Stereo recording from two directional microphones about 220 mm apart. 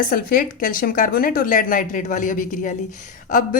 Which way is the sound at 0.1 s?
40° left (ahead or behind).